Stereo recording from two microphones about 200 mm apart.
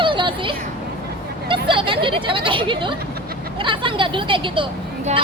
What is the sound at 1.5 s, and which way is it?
Speech, 25° right (ahead or behind).